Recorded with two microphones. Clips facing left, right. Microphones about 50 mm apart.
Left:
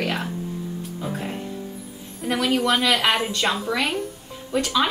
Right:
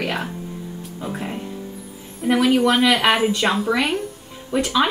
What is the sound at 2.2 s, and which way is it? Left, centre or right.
A woman's voice, centre.